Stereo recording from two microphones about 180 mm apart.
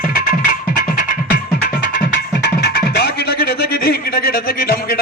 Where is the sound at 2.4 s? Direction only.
65° left (ahead or behind).